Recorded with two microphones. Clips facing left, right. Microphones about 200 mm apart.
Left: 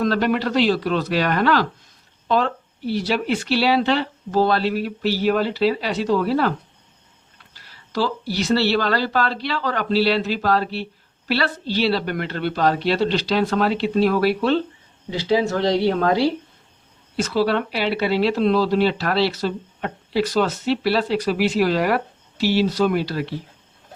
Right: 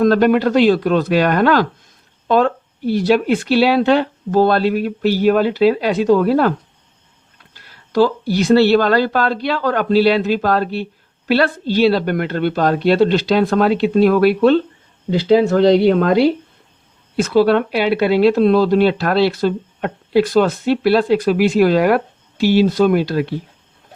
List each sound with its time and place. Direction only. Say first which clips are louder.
0.0 s speech: right 7 dB; 50° right (ahead or behind)
7.9 s speech: right 8 dB; 50° right (ahead or behind)
17.2 s speech: right 7 dB; 55° right (ahead or behind)